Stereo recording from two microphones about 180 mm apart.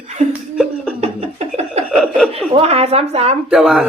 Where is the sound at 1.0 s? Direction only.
35° right (ahead or behind).